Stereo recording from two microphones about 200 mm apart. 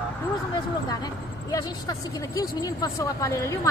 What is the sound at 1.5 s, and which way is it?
Speech, 15° left (ahead or behind).